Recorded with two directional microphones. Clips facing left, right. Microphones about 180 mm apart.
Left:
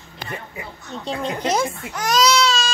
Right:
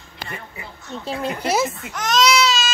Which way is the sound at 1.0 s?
5° right (ahead or behind).